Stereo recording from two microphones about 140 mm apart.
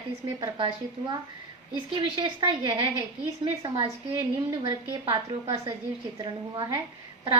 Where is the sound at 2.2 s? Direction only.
35° right (ahead or behind).